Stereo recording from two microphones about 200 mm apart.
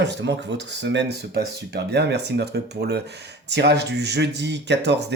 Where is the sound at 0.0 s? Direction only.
60° right (ahead or behind).